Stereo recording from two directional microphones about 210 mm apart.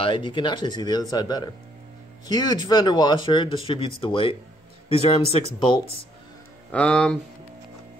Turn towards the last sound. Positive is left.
turn(degrees=5)  # may be behind; listen again after turning